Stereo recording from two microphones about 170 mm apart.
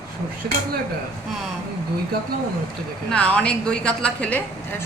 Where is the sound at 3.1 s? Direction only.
5° left (ahead or behind).